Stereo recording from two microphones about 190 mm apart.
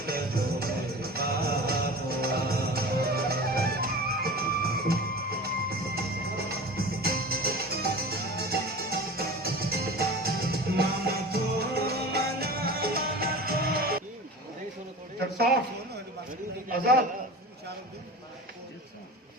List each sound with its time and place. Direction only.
0.0 s music: 50° right (ahead or behind)